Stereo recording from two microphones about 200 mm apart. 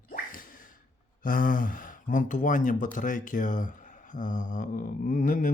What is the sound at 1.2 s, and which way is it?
Speech, 45° left (ahead or behind).